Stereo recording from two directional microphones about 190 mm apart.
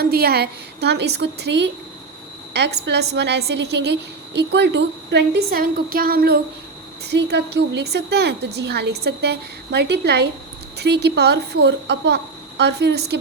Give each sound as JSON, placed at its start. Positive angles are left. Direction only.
{"t": 0.0, "sound": "a woman's voice", "side_deg": -55}